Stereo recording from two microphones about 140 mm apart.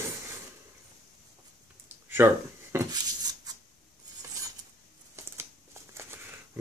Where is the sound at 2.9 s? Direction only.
30° right (ahead or behind).